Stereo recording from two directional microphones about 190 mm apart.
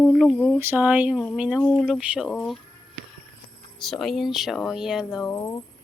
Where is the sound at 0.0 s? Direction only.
Centre (ahead or behind).